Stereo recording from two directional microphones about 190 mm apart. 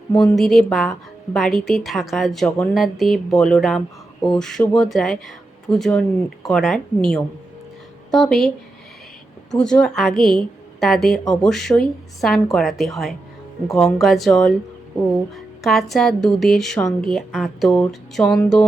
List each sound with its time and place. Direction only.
0.2 s a woman's voice: centre (ahead or behind)
9.6 s a woman's voice: 5° left (ahead or behind)